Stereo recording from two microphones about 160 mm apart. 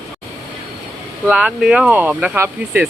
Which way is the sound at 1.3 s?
5° right (ahead or behind).